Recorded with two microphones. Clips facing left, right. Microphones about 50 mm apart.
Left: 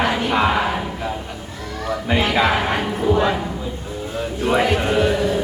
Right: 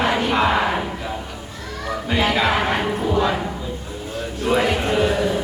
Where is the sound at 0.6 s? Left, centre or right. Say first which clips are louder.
Right 1 dB; centre.